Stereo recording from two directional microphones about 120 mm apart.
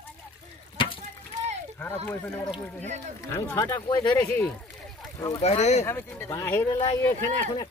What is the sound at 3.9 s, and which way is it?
Speech, 35° left (ahead or behind).